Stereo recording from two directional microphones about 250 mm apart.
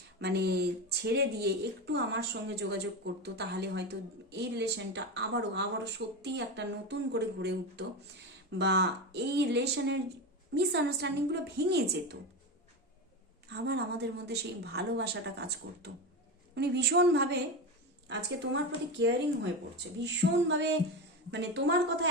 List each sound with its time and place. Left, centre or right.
0.2 s a woman's voice: right
13.5 s a woman's voice: right